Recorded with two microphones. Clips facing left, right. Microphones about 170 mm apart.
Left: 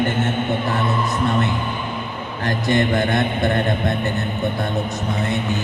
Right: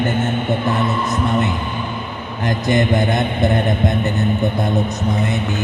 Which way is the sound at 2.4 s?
20° right (ahead or behind).